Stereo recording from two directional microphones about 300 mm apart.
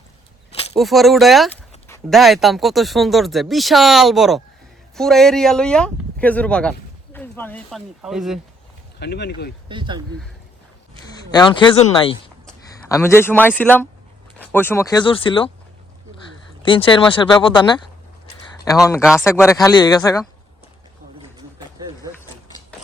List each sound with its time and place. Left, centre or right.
0.8 s speech: centre
9.0 s speech: left
9.6 s speech: centre
11.0 s a man's voice: centre
16.6 s speech: centre